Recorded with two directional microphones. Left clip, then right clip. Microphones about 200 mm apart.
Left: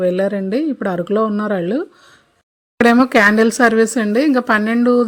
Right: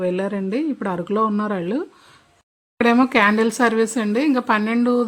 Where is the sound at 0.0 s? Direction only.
15° left (ahead or behind).